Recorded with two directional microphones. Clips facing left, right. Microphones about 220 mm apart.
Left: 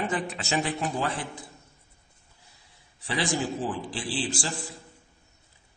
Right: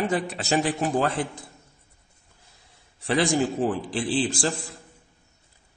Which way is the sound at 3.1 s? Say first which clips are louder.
Right 6 dB; 55° right (ahead or behind).